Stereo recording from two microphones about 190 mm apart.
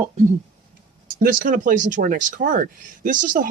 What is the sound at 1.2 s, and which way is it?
Speech, 50° right (ahead or behind).